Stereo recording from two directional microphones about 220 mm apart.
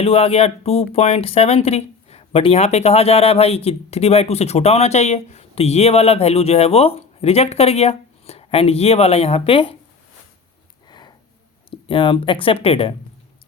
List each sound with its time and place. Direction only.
0.0 s speech: 25° left (ahead or behind)
10.8 s a sound: 20° left (ahead or behind)
11.7 s speech: 25° left (ahead or behind)